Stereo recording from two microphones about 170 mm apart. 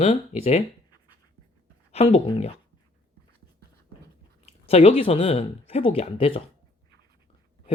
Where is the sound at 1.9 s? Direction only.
40° left (ahead or behind).